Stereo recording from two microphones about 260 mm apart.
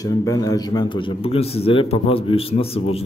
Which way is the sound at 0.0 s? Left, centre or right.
Centre.